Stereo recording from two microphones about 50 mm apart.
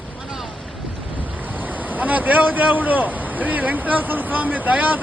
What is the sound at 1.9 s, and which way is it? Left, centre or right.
A man's voice, right.